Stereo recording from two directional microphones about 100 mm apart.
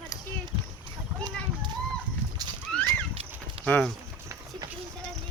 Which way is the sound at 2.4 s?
40° right (ahead or behind).